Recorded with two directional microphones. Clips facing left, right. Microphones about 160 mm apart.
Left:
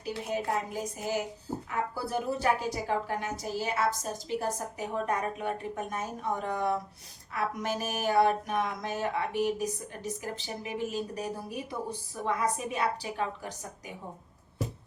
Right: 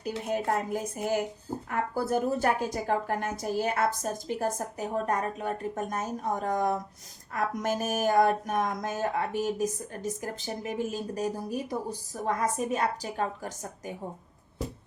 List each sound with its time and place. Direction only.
0.3 s speech: 50° right (ahead or behind)